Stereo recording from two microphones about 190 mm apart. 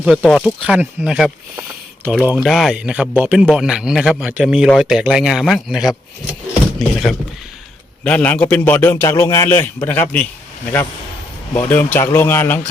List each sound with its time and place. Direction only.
0.0 s a man's voice: centre (ahead or behind)
11.7 s a man's voice: 10° left (ahead or behind)